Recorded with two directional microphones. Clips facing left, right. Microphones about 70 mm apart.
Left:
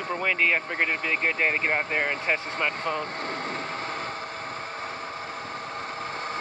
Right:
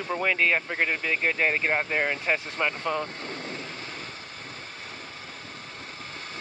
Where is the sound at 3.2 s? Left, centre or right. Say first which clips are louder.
Left 5 dB; left.